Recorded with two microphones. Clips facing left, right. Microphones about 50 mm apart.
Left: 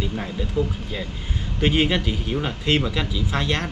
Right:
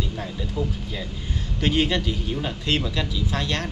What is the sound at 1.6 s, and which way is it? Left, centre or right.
Speech, centre.